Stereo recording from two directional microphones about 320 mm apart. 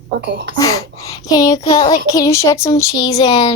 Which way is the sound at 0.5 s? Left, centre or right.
Centre.